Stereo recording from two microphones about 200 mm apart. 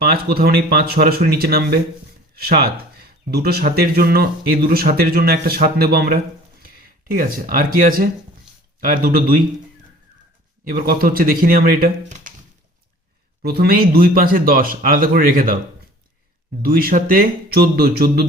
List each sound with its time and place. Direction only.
0.0 s speech: 50° right (ahead or behind)
10.7 s speech: 45° right (ahead or behind)
13.4 s speech: 50° right (ahead or behind)
16.6 s speech: 50° right (ahead or behind)